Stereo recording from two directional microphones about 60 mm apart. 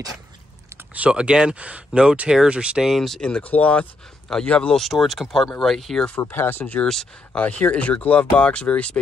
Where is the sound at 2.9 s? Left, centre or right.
Centre.